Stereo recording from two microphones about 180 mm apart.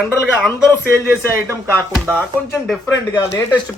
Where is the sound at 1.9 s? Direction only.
5° right (ahead or behind).